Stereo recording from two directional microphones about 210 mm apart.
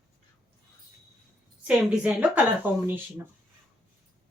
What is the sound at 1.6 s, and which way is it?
Speech, 5° right (ahead or behind).